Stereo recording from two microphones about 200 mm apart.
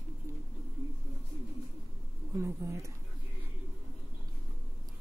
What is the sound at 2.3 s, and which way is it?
Speech, 15° right (ahead or behind).